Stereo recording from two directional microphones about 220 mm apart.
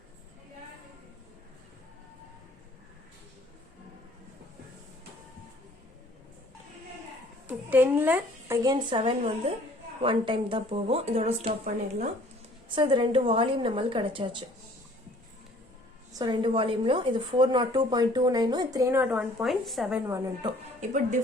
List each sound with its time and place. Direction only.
7.4 s speech: 10° right (ahead or behind)
9.0 s a woman's voice: 25° right (ahead or behind)
16.1 s a woman's voice: 20° right (ahead or behind); by 20.0 s centre (ahead or behind)
20.1 s speech: 15° right (ahead or behind)